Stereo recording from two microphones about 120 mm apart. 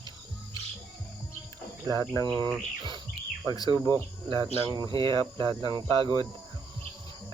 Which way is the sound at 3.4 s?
30° left (ahead or behind).